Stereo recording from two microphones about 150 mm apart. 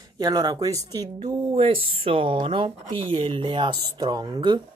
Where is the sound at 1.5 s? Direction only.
40° right (ahead or behind).